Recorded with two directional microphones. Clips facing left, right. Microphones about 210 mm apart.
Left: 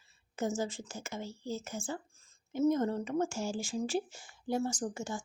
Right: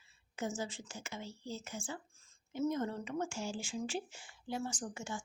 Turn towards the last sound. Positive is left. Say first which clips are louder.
# left 5 dB
turn(degrees=40)  # may be behind; listen again after turning